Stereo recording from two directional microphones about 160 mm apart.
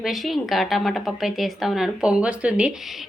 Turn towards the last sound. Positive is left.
turn(degrees=0)  # may be behind; listen again after turning